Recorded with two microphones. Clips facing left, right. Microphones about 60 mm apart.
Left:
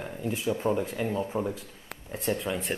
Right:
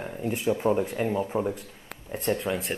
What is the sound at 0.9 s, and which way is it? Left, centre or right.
Speech, right.